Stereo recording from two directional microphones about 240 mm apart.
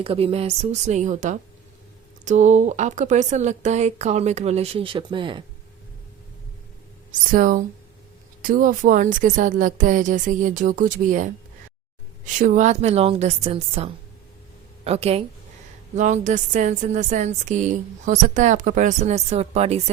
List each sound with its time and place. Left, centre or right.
0.0 s speech: right
7.1 s a woman's voice: right